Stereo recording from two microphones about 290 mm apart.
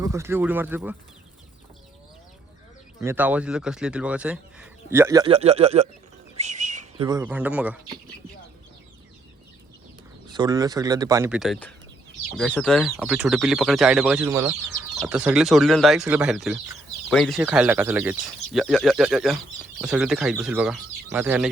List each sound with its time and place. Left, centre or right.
0.0 s speech: centre
3.0 s speech: centre
10.2 s speech: centre